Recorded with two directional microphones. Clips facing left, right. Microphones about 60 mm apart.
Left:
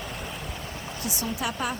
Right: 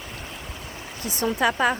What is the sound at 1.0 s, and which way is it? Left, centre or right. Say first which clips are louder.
Speech: right 8 dB; right.